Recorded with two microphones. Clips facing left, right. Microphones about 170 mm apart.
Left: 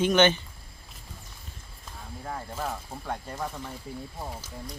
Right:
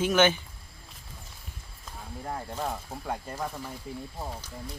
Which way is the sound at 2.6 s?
10° right (ahead or behind).